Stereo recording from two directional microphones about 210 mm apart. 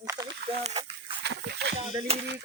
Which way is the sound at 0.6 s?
30° right (ahead or behind).